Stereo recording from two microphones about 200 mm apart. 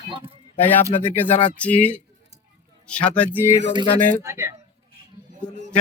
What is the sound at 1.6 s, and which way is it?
Speech, 5° left (ahead or behind).